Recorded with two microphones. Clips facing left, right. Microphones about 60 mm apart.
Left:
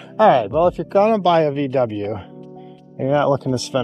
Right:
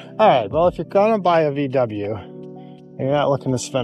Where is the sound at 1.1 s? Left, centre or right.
Right.